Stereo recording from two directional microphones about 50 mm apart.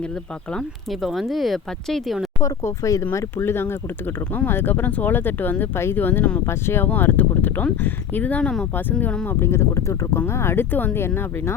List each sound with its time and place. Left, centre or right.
0.9 s speech: centre
2.4 s speech: left
3.2 s speech: left
6.4 s speech: left
6.8 s speech: left
9.3 s speech: left
10.2 s speech: left
11.0 s speech: left